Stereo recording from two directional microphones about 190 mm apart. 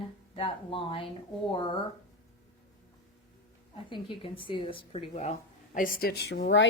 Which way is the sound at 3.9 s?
25° left (ahead or behind).